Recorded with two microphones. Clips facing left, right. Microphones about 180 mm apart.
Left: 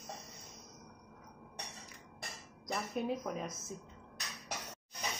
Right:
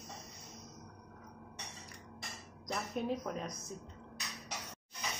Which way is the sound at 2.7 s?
5° left (ahead or behind).